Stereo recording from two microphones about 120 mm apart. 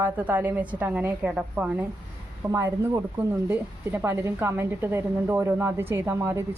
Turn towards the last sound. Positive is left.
turn(degrees=-20)  # may be behind; listen again after turning